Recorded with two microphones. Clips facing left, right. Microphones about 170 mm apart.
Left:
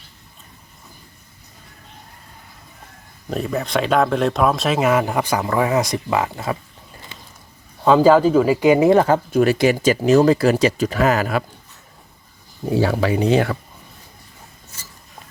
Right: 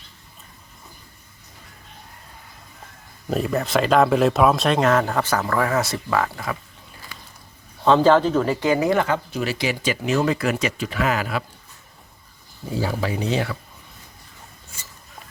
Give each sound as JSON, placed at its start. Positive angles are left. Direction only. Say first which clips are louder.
{"t": 3.2, "sound": "speech", "louder": "right 1 dB", "side_deg": 0}
{"t": 7.1, "sound": "a sound", "louder": "left 1 dB", "side_deg": 25}
{"t": 7.9, "sound": "speech", "louder": "left 3 dB", "side_deg": 5}
{"t": 9.0, "sound": "speech", "louder": "left 7 dB", "side_deg": 40}
{"t": 12.7, "sound": "speech", "louder": "left 6 dB", "side_deg": 70}